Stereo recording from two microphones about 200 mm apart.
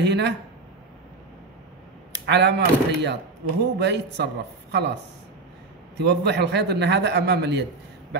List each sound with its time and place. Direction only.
0.0 s speech: 60° right (ahead or behind)
2.2 s speech: 60° right (ahead or behind)
5.9 s speech: 60° right (ahead or behind)